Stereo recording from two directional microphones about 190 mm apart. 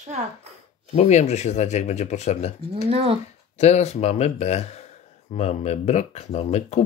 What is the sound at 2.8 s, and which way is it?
Speech, 30° right (ahead or behind).